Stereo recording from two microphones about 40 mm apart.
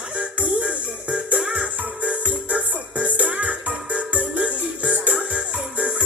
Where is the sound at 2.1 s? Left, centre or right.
Right.